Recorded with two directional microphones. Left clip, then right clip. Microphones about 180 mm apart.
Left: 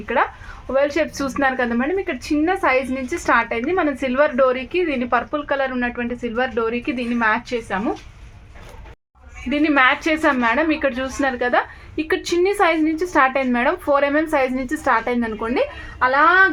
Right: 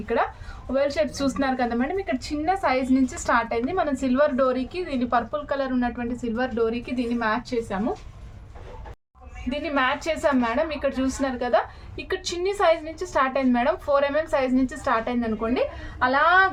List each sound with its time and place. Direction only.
0.0 s a woman's voice: 35° left (ahead or behind)
9.5 s a woman's voice: 35° left (ahead or behind)